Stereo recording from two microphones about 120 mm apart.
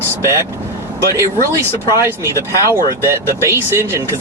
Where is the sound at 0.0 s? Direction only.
25° right (ahead or behind).